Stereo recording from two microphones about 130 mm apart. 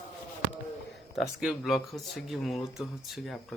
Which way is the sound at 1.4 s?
Centre (ahead or behind).